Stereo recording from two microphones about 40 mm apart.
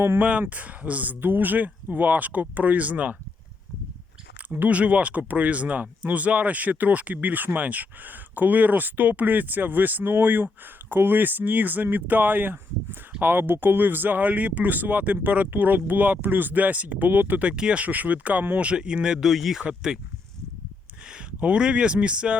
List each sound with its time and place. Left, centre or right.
0.2 s speech: right
1.1 s speech: right
4.4 s speech: right
17.4 s speech: right
17.8 s speech: right
18.6 s speech: right
19.2 s speech: centre
21.6 s speech: right